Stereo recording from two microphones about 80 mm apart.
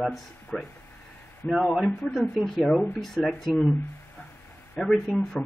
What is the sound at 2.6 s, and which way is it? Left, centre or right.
Speech, centre.